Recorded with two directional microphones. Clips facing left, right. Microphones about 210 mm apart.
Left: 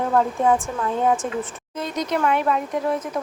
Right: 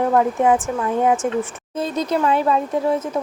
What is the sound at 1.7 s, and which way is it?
Speech, 30° right (ahead or behind).